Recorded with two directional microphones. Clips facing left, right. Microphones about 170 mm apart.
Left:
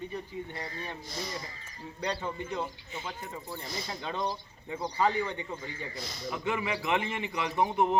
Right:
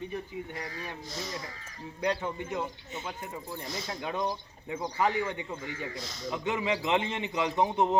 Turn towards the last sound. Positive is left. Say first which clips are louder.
# right 1 dB
turn(degrees=-20)  # may be behind; listen again after turning